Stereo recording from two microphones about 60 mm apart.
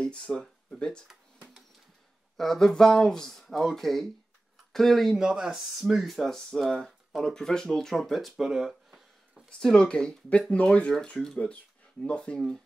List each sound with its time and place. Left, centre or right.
0.0 s speech: centre
2.3 s speech: centre
5.1 s speech: centre
9.5 s speech: centre